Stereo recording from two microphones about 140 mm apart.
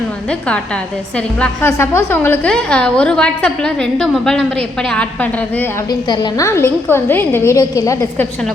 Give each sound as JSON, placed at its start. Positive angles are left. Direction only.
{"t": 1.4, "sound": "a woman's voice", "side_deg": 15}
{"t": 5.9, "sound": "a woman's voice", "side_deg": 25}